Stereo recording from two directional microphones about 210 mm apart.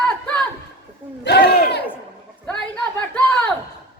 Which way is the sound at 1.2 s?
50° left (ahead or behind).